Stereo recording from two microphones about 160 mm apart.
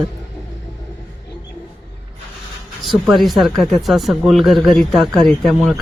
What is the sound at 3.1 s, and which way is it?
Speech, centre (ahead or behind).